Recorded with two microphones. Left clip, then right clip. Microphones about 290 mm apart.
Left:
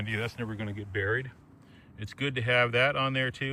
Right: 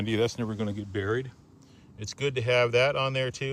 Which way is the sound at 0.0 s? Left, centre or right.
Centre.